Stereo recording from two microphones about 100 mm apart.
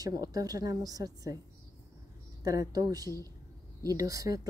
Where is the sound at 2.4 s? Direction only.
35° right (ahead or behind).